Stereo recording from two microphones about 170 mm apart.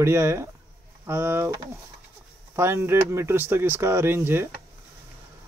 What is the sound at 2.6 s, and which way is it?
Speech, 15° right (ahead or behind).